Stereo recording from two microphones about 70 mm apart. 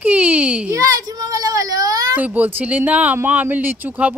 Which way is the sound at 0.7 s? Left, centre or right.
Right.